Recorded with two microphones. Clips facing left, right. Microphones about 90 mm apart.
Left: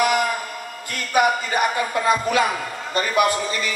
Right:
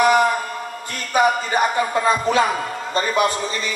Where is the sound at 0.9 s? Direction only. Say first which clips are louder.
Right 1 dB; 30° right (ahead or behind).